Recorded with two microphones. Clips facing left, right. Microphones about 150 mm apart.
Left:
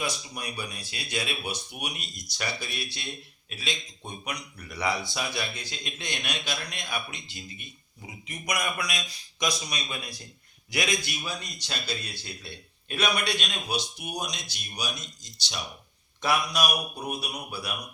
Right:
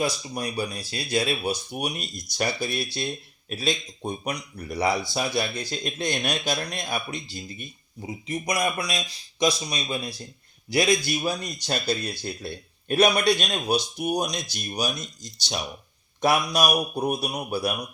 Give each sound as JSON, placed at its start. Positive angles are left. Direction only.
{"t": 0.0, "sound": "a man's voice", "side_deg": -35}